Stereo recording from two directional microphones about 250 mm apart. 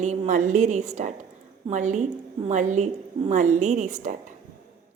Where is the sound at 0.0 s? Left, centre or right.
Right.